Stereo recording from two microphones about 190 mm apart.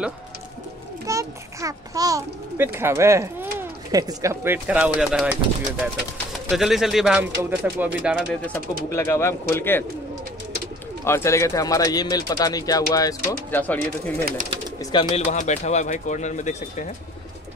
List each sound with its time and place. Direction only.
1.0 s a child's voice: 15° right (ahead or behind)
4.6 s speech: 5° right (ahead or behind)
6.5 s speech: centre (ahead or behind)
8.9 s speech: 15° left (ahead or behind)
11.1 s speech: 15° left (ahead or behind)
14.2 s speech: 45° right (ahead or behind)
14.8 s speech: 25° left (ahead or behind)
15.3 s speech: 40° left (ahead or behind)